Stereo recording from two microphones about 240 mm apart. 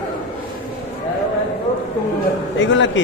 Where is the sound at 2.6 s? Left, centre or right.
Left.